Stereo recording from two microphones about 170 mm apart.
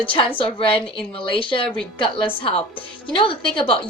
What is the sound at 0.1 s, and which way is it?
A woman's voice, 30° left (ahead or behind).